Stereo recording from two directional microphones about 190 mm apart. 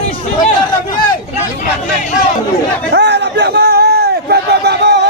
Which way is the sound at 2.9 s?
65° right (ahead or behind).